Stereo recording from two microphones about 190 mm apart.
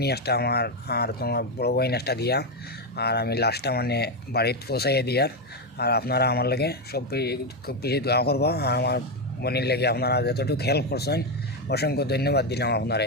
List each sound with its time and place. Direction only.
0.0 s speech: 60° left (ahead or behind)